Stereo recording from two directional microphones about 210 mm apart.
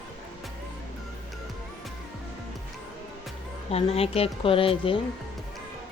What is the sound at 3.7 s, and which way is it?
Speech, 30° left (ahead or behind).